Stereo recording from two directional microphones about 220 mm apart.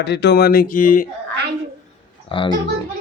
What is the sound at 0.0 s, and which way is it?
Speech, 50° left (ahead or behind).